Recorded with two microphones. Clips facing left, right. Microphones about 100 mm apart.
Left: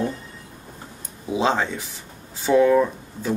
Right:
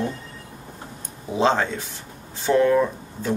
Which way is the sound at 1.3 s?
10° left (ahead or behind).